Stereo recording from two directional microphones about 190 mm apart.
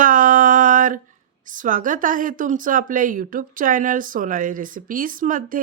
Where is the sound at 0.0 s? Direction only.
45° right (ahead or behind).